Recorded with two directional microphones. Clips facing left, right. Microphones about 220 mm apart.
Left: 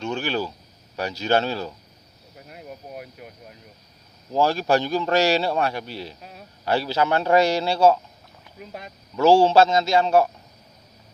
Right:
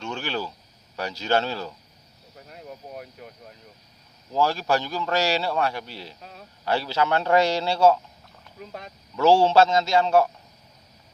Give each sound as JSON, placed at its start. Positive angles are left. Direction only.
{"t": 0.0, "sound": "a sound", "side_deg": 15}
{"t": 0.9, "sound": "speech", "side_deg": 15}
{"t": 4.3, "sound": "speech", "side_deg": 20}